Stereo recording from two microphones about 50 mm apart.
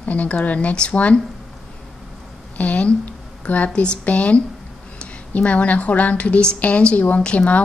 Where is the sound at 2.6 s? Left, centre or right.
Left.